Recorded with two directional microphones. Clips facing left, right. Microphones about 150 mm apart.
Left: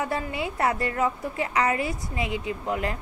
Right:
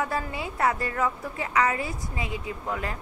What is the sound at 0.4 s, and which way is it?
A woman's voice, 25° left (ahead or behind).